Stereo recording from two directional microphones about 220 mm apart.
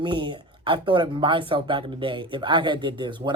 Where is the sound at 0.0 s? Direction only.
20° right (ahead or behind).